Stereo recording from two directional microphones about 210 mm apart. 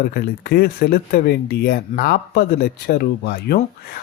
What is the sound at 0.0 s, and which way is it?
Speech, 45° left (ahead or behind).